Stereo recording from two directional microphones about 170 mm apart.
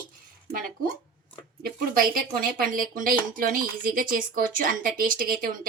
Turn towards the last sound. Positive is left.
turn(degrees=-60)  # may be behind; listen again after turning